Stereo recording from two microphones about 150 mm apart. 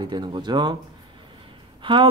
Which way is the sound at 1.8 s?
35° right (ahead or behind).